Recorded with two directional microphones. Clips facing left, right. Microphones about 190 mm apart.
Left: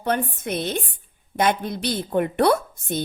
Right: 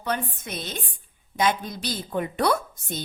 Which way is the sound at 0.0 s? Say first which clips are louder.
Left 5 dB; 55° left (ahead or behind).